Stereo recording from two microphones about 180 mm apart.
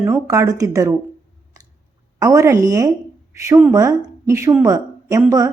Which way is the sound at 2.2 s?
15° right (ahead or behind).